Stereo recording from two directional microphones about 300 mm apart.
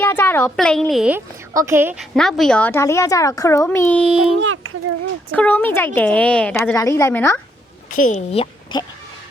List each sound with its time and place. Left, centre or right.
0.0 s a woman's voice: centre
4.4 s speech: right
5.3 s a woman's voice: centre
7.9 s speech: left